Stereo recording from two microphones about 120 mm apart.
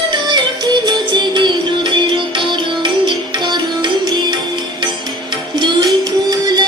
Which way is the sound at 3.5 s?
40° right (ahead or behind).